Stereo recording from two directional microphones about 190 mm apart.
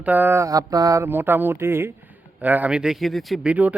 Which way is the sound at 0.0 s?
10° right (ahead or behind).